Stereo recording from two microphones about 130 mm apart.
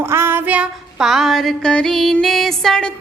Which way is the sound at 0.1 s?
15° right (ahead or behind).